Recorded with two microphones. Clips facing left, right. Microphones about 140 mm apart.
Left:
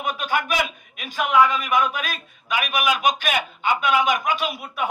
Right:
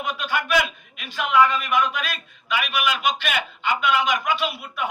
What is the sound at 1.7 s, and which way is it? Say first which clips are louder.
A man's voice: left 1 dB; 45° left (ahead or behind).